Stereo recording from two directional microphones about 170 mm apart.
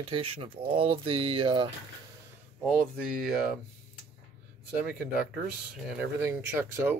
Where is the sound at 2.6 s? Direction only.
Centre (ahead or behind).